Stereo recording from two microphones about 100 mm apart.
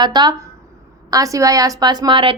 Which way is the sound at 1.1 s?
35° right (ahead or behind).